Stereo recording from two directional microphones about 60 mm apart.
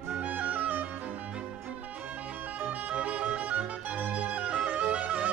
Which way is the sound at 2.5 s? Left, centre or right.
Right.